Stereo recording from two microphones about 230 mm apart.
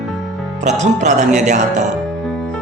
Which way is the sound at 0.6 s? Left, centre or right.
Right.